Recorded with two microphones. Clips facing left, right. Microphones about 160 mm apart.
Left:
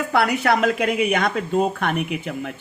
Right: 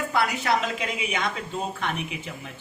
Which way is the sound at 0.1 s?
60° left (ahead or behind).